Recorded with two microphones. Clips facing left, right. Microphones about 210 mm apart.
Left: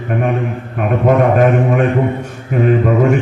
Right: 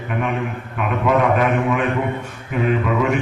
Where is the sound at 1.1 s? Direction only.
45° left (ahead or behind).